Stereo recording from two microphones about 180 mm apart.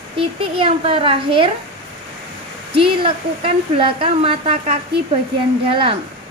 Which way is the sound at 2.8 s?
30° right (ahead or behind).